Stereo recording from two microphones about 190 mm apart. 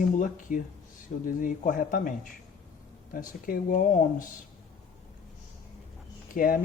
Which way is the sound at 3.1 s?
45° left (ahead or behind).